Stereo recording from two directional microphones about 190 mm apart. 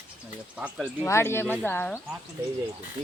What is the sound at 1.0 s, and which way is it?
Speech, 15° left (ahead or behind).